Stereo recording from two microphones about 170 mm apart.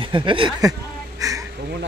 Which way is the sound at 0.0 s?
30° right (ahead or behind).